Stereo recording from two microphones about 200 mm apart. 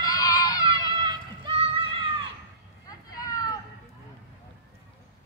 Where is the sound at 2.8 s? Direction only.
20° left (ahead or behind).